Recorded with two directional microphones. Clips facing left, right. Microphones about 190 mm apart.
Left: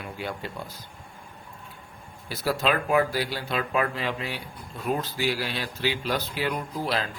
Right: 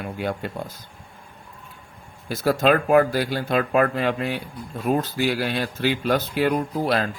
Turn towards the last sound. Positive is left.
turn(degrees=-50)  # may be behind; listen again after turning